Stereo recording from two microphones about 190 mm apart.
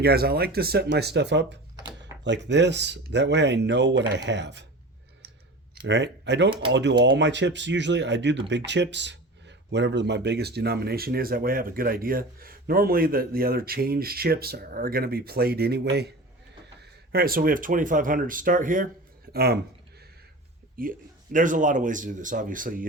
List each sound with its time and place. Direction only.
0.0 s speech: 55° right (ahead or behind)
5.7 s speech: 65° right (ahead or behind); by 18.9 s 45° right (ahead or behind)
19.3 s speech: 55° right (ahead or behind)
20.8 s speech: 45° right (ahead or behind)